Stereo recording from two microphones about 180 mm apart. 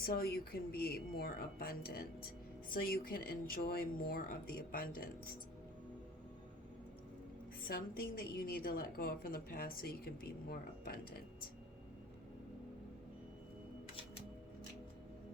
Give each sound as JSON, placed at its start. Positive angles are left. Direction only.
{"t": 0.0, "sound": "a woman's voice", "side_deg": 55}
{"t": 7.7, "sound": "a woman's voice", "side_deg": 55}